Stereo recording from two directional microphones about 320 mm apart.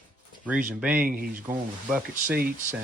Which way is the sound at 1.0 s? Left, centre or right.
Right.